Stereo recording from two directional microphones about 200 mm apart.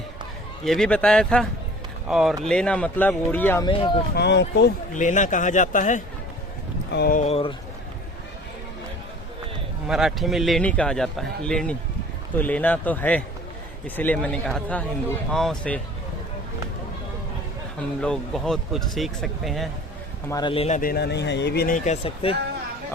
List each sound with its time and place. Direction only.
0.6 s a man's voice: centre (ahead or behind)
3.7 s speech: 25° left (ahead or behind)
4.1 s speech: 60° left (ahead or behind)
4.9 s speech: 40° left (ahead or behind)
6.9 s speech: 50° left (ahead or behind)
7.2 s speech: 30° left (ahead or behind)
9.8 s a man's voice: centre (ahead or behind)
18.0 s a man's voice: 5° left (ahead or behind)
20.3 s speech: 25° left (ahead or behind); by 21.8 s 50° left (ahead or behind)
21.8 s speech: 30° left (ahead or behind)